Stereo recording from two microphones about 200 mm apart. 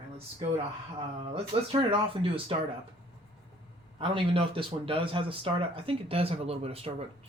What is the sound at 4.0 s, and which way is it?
Speech, 25° right (ahead or behind).